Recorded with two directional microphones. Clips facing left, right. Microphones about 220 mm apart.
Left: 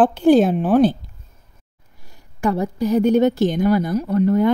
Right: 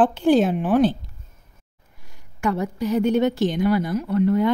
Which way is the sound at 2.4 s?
35° left (ahead or behind).